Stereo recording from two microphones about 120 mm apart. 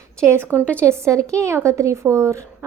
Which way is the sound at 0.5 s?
10° left (ahead or behind).